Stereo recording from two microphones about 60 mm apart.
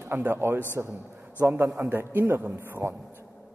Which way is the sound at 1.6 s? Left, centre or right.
Right.